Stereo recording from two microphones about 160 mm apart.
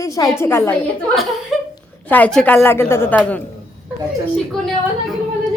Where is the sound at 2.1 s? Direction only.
10° left (ahead or behind).